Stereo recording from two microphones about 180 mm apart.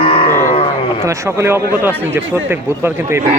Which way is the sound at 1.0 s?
15° right (ahead or behind).